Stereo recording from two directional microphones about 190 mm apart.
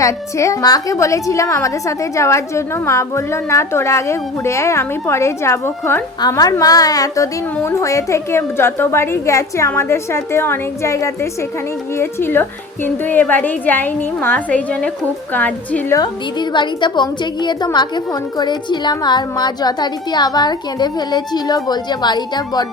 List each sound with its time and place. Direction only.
0.0 s a woman's voice: 15° left (ahead or behind)
16.0 s a woman's voice: 25° left (ahead or behind)